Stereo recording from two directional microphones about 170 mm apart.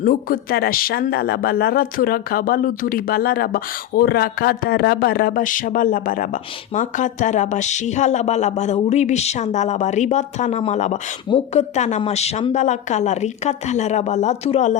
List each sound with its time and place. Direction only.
0.0 s speech: 55° left (ahead or behind); by 14.8 s 40° left (ahead or behind)